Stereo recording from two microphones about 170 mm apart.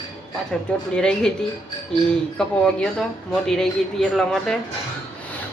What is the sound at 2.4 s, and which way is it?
Speech, 5° left (ahead or behind).